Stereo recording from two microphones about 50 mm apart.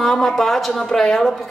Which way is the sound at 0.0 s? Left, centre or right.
Centre.